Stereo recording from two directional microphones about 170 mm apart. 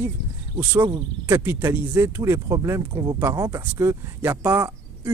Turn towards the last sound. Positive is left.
turn(degrees=-15)  # may be behind; listen again after turning